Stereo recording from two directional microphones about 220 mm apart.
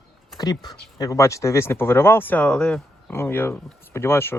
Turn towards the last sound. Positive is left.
turn(degrees=10)  # may be behind; listen again after turning